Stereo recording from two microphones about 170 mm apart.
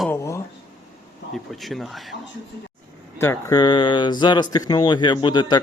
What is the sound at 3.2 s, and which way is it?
Speech, 15° left (ahead or behind).